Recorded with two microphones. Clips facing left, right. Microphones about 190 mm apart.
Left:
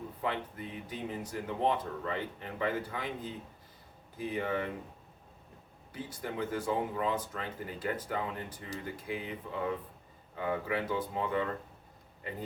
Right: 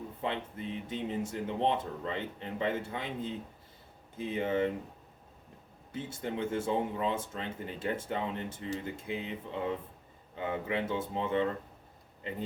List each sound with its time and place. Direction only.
0.2 s speech: 25° right (ahead or behind)
5.9 s speech: 25° right (ahead or behind)